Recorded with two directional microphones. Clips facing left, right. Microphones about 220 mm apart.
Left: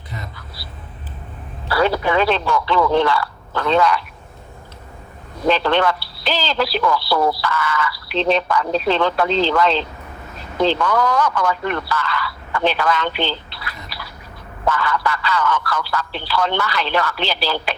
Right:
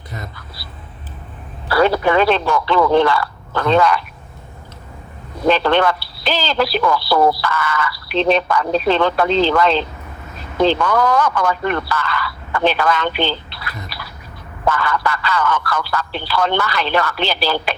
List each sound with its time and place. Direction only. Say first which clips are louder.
1.7 s speech: right 3 dB; 50° right (ahead or behind)
5.5 s speech: right 2 dB; 50° right (ahead or behind)